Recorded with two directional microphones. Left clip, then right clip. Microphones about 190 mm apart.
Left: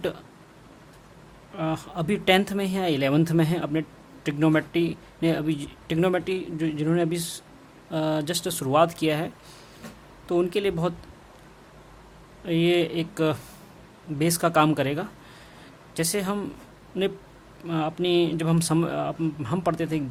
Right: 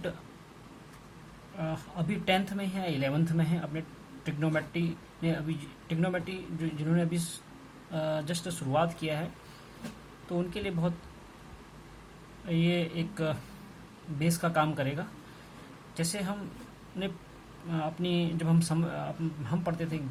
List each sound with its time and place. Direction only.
1.5 s speech: 50° left (ahead or behind)
10.2 s speech: 50° left (ahead or behind)
12.5 s speech: 50° left (ahead or behind)
17.7 s speech: 45° left (ahead or behind)